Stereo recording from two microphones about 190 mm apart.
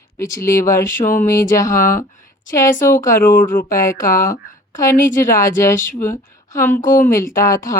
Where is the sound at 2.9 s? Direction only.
15° left (ahead or behind).